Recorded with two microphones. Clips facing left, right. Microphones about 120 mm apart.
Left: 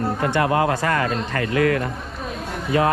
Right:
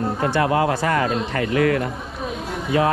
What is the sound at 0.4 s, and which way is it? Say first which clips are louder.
Speech: even; 30° left (ahead or behind).